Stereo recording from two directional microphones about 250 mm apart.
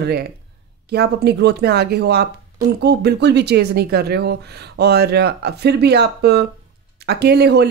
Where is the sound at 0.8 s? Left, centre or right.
Right.